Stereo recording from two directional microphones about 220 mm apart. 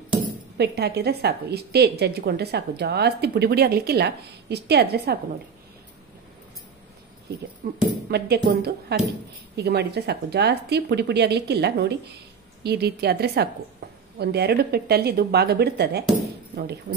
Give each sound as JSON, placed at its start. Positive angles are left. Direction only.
{"t": 0.6, "sound": "a woman's voice", "side_deg": -50}
{"t": 7.6, "sound": "a sound", "side_deg": -40}
{"t": 8.1, "sound": "a woman's voice", "side_deg": -45}